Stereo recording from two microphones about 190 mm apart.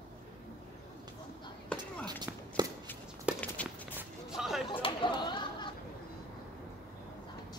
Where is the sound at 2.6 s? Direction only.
20° right (ahead or behind).